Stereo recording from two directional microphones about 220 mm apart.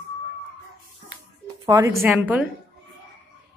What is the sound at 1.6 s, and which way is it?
Speech, 15° right (ahead or behind).